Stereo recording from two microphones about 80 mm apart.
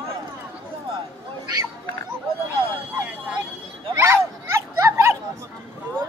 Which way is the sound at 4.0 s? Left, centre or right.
Right.